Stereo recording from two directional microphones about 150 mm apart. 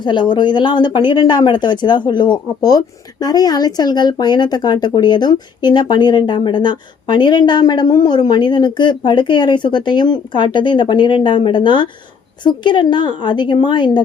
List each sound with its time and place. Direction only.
0.0 s speech: 30° left (ahead or behind)